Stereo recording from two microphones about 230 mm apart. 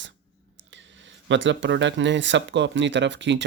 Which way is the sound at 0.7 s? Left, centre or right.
Right.